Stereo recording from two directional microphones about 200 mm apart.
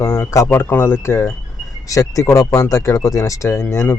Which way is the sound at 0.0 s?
10° left (ahead or behind).